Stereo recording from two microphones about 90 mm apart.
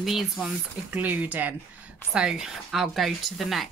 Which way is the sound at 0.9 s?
20° right (ahead or behind).